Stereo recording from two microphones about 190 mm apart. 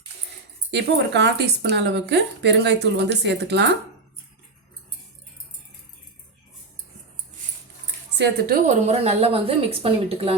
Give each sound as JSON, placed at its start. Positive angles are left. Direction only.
{"t": 0.7, "sound": "a woman's voice", "side_deg": -65}
{"t": 8.1, "sound": "a woman's voice", "side_deg": -60}
{"t": 8.6, "sound": "a woman's voice", "side_deg": -35}